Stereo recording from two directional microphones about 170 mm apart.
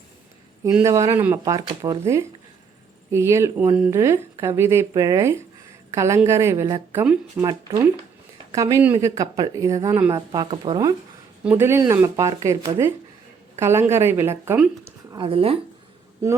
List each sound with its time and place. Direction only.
0.8 s speech: 20° right (ahead or behind)
11.4 s speech: 15° right (ahead or behind)
15.1 s speech: 30° right (ahead or behind)